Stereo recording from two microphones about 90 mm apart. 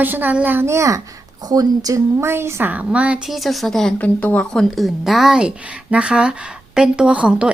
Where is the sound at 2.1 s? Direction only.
30° right (ahead or behind).